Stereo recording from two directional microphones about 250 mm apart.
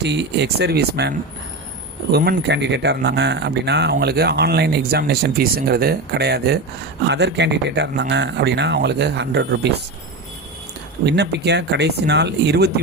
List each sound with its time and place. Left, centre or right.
0.0 s speech: right
2.1 s speech: right
11.0 s speech: right